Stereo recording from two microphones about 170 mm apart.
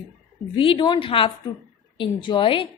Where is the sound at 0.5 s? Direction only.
30° left (ahead or behind).